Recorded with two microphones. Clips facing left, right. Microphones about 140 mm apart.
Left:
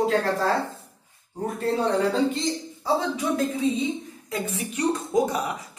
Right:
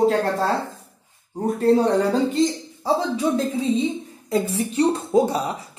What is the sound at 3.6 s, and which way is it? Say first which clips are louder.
A woman's voice: right 3 dB; 30° right (ahead or behind).